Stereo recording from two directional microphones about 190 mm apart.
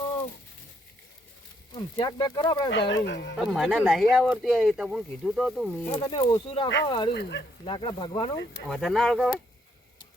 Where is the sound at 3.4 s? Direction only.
Centre (ahead or behind).